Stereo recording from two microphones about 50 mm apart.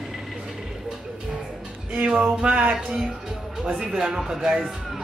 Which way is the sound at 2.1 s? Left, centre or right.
Centre.